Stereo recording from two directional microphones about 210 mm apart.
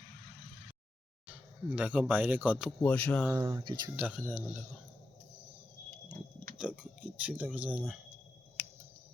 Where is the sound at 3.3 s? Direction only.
15° right (ahead or behind).